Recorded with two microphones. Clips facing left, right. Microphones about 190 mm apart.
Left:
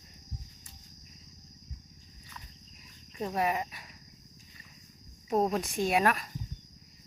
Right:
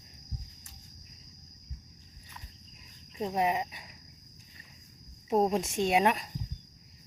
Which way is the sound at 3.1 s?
20° right (ahead or behind).